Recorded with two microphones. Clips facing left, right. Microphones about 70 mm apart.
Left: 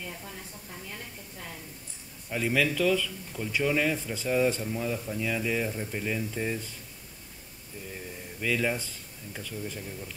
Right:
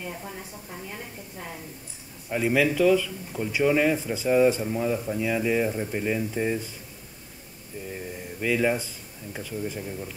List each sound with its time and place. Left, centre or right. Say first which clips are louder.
0.0 s speech: right 5 dB; centre
7.9 s speech: right 5 dB; centre